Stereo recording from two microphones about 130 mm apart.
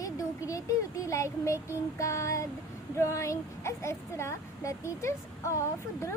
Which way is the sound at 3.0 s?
25° left (ahead or behind).